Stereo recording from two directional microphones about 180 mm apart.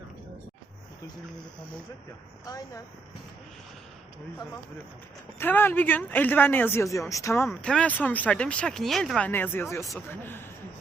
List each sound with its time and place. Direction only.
2.5 s speech: 20° left (ahead or behind)
5.4 s speech: 10° left (ahead or behind)